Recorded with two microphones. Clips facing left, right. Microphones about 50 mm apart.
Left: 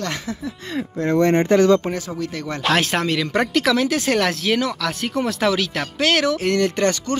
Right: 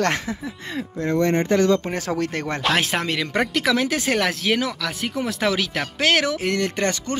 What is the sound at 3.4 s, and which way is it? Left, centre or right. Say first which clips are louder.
Speech: left 2 dB; centre.